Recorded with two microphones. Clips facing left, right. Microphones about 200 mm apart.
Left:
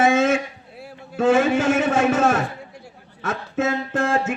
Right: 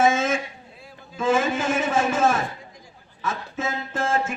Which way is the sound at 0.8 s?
70° left (ahead or behind).